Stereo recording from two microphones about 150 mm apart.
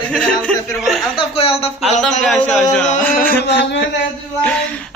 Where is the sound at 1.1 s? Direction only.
40° left (ahead or behind).